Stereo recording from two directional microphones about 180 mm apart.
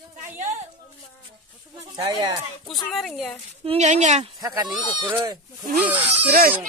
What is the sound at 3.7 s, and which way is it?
Speech, 40° right (ahead or behind).